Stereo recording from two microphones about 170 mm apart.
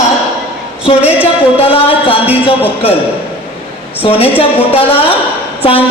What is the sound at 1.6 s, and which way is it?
Speech, 35° left (ahead or behind).